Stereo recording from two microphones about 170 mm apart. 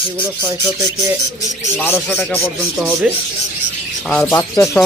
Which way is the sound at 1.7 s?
10° left (ahead or behind).